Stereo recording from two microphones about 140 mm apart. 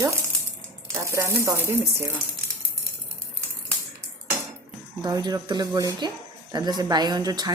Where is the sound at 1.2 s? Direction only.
20° right (ahead or behind).